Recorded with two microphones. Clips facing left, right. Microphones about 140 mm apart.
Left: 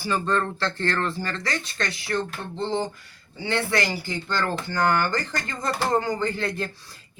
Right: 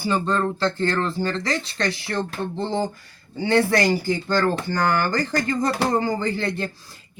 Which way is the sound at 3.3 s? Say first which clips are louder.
Right 6 dB; 40° right (ahead or behind).